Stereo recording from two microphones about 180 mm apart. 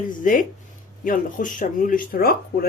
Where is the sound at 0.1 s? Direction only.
45° left (ahead or behind).